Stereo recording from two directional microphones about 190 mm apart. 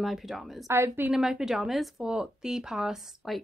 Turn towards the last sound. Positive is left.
turn(degrees=-5)  # may be behind; listen again after turning